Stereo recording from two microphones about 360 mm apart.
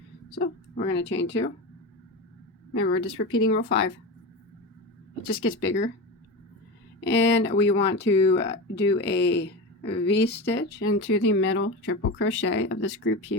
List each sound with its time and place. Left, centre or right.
0.9 s speech: left
2.7 s speech: left
5.2 s speech: left
7.0 s speech: left